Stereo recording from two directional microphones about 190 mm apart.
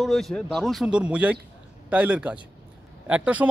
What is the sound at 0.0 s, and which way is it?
Speech, centre (ahead or behind).